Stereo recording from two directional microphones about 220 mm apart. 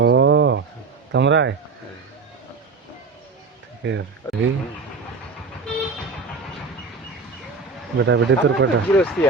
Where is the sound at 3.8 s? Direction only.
55° right (ahead or behind).